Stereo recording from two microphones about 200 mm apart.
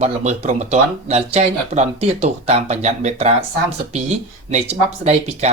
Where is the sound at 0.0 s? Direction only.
35° right (ahead or behind).